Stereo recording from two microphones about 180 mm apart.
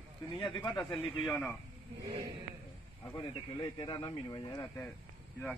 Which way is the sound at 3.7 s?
25° left (ahead or behind).